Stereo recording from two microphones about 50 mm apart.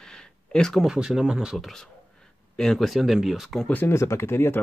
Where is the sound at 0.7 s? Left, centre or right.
Centre.